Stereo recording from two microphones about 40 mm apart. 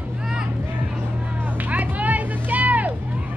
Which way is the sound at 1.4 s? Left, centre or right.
Right.